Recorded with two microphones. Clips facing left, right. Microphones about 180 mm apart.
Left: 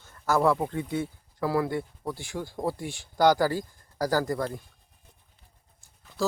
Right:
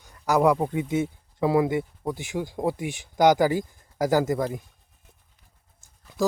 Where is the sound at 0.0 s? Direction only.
15° right (ahead or behind).